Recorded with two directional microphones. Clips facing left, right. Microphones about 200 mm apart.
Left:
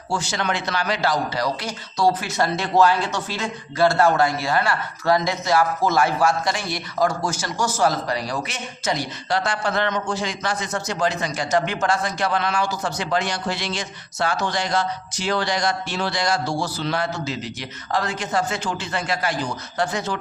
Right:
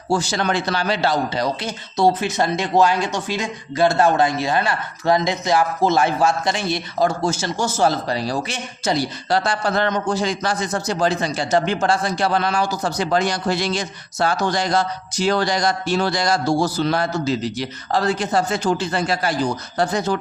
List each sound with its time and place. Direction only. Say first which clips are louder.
0.1 s a man's voice: right 5 dB; 35° right (ahead or behind)